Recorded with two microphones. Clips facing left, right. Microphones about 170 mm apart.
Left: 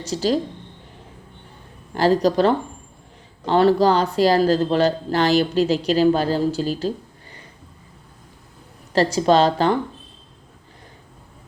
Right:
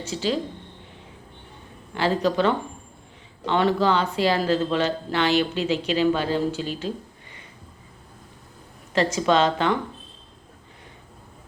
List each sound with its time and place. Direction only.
0.0 s speech: 40° left (ahead or behind)
2.0 s speech: 40° left (ahead or behind)
8.9 s speech: 35° left (ahead or behind)